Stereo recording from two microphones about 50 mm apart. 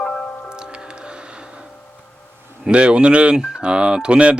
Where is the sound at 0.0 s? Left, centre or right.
Left.